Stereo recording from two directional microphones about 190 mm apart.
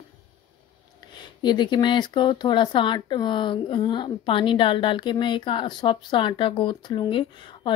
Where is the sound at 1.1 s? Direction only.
25° left (ahead or behind).